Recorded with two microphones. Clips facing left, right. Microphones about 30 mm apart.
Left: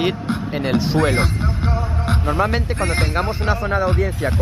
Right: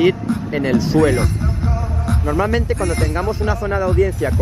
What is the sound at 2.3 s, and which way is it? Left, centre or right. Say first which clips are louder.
Speech: right 4 dB; left.